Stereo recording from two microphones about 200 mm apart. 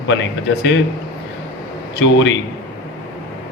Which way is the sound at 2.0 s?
65° left (ahead or behind).